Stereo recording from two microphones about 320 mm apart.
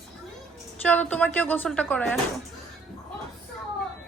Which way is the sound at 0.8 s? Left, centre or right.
Centre.